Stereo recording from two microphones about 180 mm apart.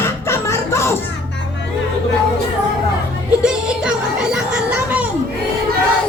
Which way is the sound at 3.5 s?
5° right (ahead or behind).